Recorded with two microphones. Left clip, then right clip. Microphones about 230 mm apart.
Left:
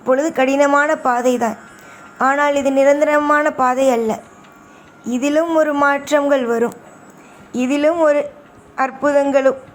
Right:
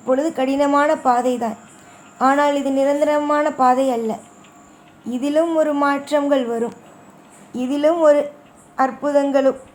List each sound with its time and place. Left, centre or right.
0.0 s a woman's voice: centre